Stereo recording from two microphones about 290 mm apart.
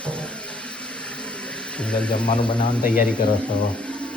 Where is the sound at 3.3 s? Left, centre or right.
Centre.